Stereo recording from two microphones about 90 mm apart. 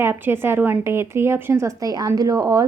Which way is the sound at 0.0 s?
25° right (ahead or behind).